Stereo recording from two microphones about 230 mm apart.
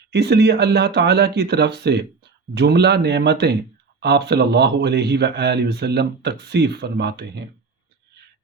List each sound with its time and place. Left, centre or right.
0.1 s speech: right